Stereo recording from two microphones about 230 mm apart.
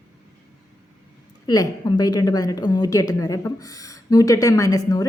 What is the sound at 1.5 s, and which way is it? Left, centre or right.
A woman's voice, centre.